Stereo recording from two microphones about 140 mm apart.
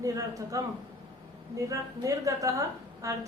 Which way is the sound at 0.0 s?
25° right (ahead or behind).